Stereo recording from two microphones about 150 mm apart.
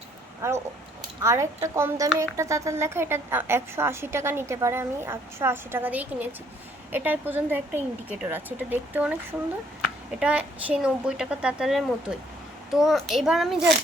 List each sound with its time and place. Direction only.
1.2 s a woman's voice: 20° right (ahead or behind); by 13.6 s centre (ahead or behind)